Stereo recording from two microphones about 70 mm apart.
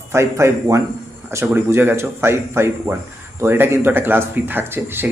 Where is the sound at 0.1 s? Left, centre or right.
Right.